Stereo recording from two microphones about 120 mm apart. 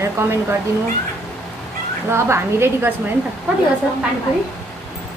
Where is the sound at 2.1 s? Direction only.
20° right (ahead or behind).